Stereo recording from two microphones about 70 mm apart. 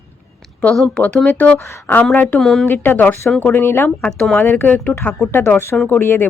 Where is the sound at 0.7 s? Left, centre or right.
Centre.